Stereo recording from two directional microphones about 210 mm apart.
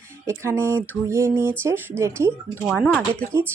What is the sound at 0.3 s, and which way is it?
Speech, 10° right (ahead or behind).